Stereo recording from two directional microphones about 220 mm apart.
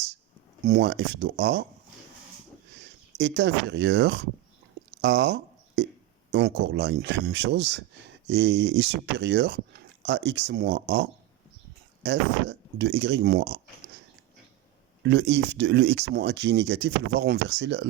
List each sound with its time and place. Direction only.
0.6 s speech: 50° right (ahead or behind)
3.2 s speech: 50° right (ahead or behind)
4.9 s a sound: 50° right (ahead or behind)
6.3 s speech: 50° right (ahead or behind)
15.0 s speech: 50° right (ahead or behind)